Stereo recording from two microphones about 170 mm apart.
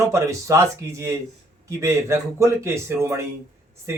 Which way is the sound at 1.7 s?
15° right (ahead or behind).